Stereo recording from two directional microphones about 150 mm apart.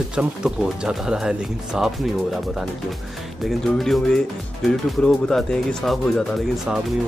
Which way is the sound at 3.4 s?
Centre (ahead or behind).